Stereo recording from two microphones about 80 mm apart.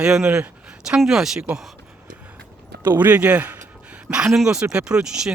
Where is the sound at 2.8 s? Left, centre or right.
Right.